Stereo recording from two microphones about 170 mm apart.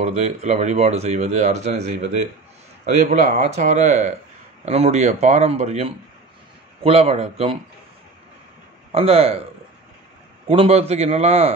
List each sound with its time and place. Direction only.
0.0 s speech: 40° right (ahead or behind)
8.9 s speech: 35° right (ahead or behind)
10.5 s speech: 35° right (ahead or behind)